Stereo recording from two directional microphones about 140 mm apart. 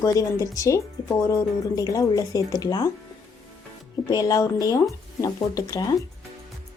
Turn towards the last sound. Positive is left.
turn(degrees=25)  # may be behind; listen again after turning